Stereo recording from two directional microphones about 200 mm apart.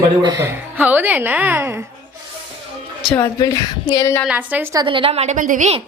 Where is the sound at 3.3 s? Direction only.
20° left (ahead or behind).